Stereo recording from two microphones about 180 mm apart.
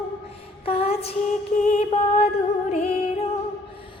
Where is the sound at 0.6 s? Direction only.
35° left (ahead or behind).